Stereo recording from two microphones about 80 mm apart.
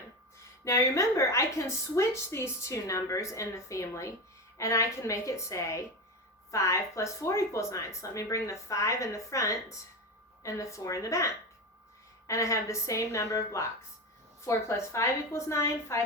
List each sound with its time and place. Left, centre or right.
0.6 s a woman's voice: left
12.3 s a woman's voice: left